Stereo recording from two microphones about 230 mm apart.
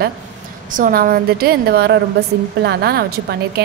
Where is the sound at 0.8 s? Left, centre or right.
Right.